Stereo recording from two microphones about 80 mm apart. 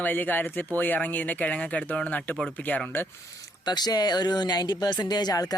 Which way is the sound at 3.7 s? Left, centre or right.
Left.